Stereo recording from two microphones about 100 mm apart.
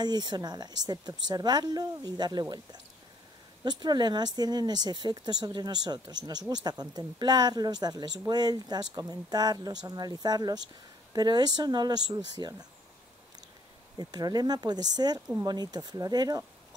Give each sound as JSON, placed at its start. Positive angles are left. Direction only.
{"t": 0.0, "sound": "speech", "side_deg": -45}
{"t": 3.6, "sound": "speech", "side_deg": -45}
{"t": 13.9, "sound": "speech", "side_deg": -40}